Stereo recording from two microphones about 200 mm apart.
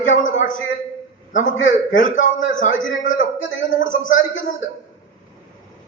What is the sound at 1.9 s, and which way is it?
Speech, 40° left (ahead or behind).